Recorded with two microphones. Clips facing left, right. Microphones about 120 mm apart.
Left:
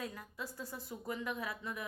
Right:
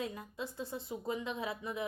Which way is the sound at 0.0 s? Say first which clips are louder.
Right 4 dB; 25° right (ahead or behind).